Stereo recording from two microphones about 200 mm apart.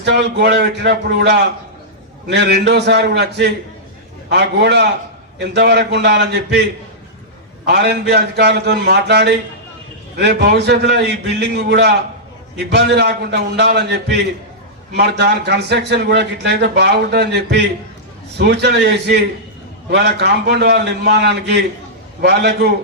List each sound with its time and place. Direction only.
0.0 s a man's voice: 60° right (ahead or behind)
7.6 s a man's voice: 55° right (ahead or behind)
14.9 s a man's voice: 55° right (ahead or behind)